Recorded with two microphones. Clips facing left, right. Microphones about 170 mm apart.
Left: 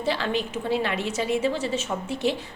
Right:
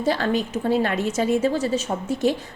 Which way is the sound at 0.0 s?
45° right (ahead or behind).